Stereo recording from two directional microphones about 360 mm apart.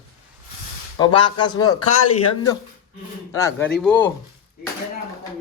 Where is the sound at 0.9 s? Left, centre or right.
Centre.